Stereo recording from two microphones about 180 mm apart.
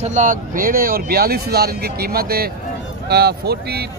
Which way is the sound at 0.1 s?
45° right (ahead or behind).